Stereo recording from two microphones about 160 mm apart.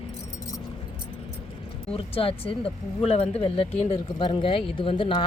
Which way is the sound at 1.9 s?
35° left (ahead or behind).